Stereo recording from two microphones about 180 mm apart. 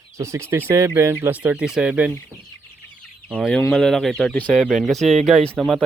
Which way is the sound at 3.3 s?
5° left (ahead or behind).